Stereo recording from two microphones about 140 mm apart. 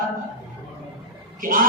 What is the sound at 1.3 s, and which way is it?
Speech, 80° right.